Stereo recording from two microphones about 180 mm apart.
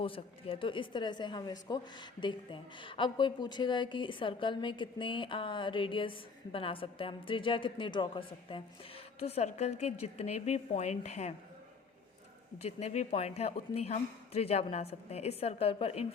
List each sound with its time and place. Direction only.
0.0 s a woman's voice: 30° left (ahead or behind)
12.6 s a woman's voice: 35° left (ahead or behind)